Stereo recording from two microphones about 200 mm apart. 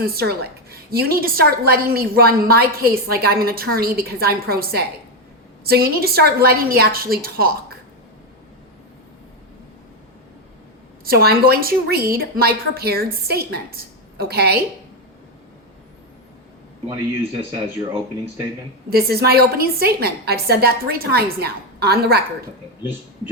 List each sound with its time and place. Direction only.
0.0 s a woman's voice: 50° right (ahead or behind)
11.0 s a woman's voice: 50° right (ahead or behind)
18.9 s a woman's voice: 50° right (ahead or behind)